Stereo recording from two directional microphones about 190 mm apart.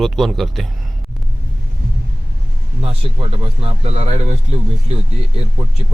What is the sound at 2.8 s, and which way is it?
Speech, 30° right (ahead or behind).